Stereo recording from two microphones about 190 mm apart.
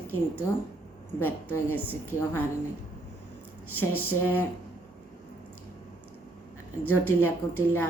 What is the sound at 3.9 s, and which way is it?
Speech, 10° left (ahead or behind).